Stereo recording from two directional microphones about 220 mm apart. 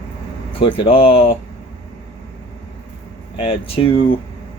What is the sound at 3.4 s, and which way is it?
Speech, 25° left (ahead or behind).